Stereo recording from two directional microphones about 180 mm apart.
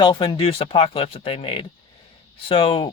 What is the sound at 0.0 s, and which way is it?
Speech, 25° left (ahead or behind).